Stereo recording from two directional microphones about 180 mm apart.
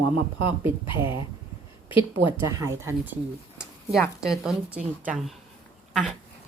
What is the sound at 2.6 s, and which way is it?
Speech, 15° right (ahead or behind).